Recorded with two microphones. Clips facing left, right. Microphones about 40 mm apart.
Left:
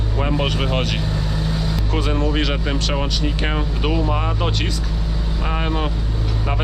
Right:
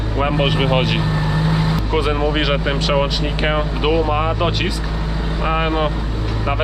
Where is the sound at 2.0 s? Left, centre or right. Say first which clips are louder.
Right 1 dB; centre.